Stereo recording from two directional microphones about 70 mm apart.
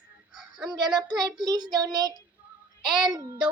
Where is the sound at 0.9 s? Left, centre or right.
Right.